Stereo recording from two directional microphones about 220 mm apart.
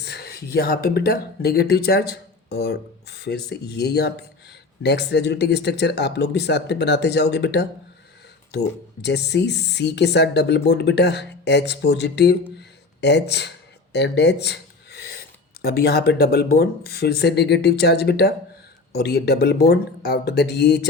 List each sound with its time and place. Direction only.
0.0 s speech: 45° left (ahead or behind)
9.0 s speech: 50° left (ahead or behind)
13.9 s a sound: 50° left (ahead or behind)
15.6 s speech: 45° left (ahead or behind)